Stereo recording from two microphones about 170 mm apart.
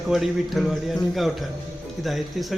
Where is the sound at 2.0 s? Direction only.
Centre (ahead or behind).